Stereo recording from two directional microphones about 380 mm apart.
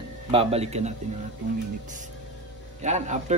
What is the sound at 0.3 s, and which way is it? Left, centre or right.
Speech, centre.